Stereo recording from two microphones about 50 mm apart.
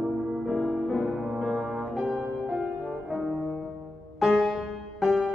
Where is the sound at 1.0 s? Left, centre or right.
Centre.